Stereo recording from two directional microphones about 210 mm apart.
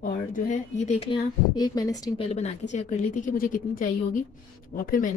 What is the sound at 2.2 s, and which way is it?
A woman's voice, 30° left (ahead or behind).